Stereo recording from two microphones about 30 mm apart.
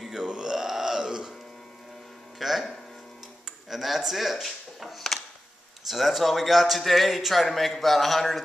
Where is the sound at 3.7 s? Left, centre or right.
Centre.